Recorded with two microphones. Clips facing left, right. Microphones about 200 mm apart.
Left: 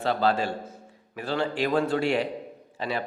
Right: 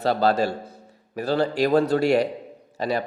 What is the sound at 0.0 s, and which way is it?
A man's voice, 40° right (ahead or behind).